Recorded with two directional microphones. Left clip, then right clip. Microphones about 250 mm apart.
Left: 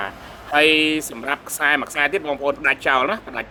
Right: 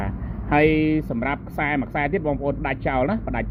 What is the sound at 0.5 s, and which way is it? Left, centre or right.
Speech, centre.